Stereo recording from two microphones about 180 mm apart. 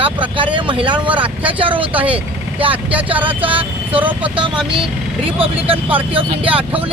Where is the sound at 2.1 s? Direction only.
30° right (ahead or behind).